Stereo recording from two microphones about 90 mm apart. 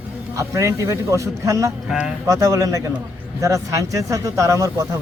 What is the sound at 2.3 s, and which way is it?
A man's voice, 40° right (ahead or behind).